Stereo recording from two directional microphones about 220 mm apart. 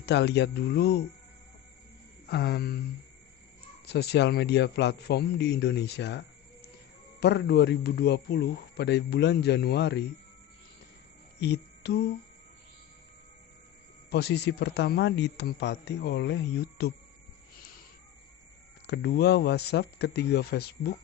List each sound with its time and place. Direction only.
0.0 s a man's voice: 50° left (ahead or behind)
2.2 s a man's voice: 50° left (ahead or behind)
3.8 s a man's voice: 50° left (ahead or behind)
11.3 s music: 50° left (ahead or behind)
14.1 s a man's voice: 50° left (ahead or behind)
18.9 s a man's voice: 50° left (ahead or behind)